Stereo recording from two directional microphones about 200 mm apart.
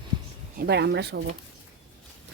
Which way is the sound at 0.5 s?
55° right (ahead or behind).